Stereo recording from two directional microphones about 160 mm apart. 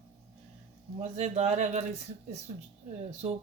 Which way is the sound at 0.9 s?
45° right (ahead or behind).